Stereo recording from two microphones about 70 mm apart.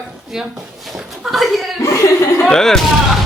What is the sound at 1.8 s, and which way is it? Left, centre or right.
Speech, left.